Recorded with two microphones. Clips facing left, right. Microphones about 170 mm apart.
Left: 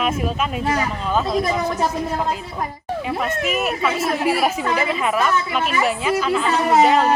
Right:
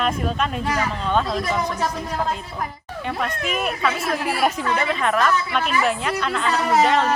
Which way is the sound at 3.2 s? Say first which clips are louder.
Left 2 dB; 5° left (ahead or behind).